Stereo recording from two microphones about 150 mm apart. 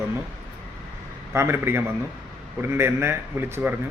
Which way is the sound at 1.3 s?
15° right (ahead or behind).